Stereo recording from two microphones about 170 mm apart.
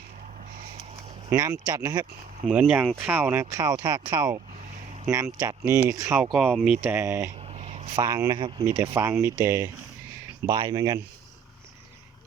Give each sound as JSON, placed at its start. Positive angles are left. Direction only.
{"t": 1.3, "sound": "speech", "side_deg": -20}
{"t": 2.5, "sound": "speech", "side_deg": -5}
{"t": 6.3, "sound": "speech", "side_deg": 0}
{"t": 6.8, "sound": "speech", "side_deg": -15}
{"t": 7.3, "sound": "a sound", "side_deg": -35}
{"t": 7.9, "sound": "speech", "side_deg": -20}